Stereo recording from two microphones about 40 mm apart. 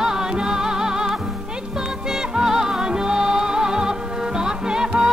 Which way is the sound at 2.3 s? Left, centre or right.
Centre.